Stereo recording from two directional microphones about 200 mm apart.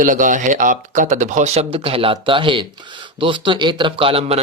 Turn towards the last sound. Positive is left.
turn(degrees=-30)  # may be behind; listen again after turning